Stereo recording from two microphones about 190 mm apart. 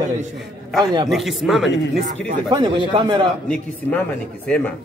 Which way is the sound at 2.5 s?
25° right (ahead or behind).